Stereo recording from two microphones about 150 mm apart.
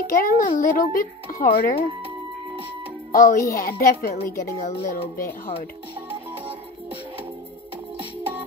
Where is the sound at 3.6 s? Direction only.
90° left.